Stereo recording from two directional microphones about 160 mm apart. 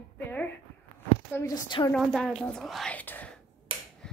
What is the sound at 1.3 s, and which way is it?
Speech, 15° left (ahead or behind).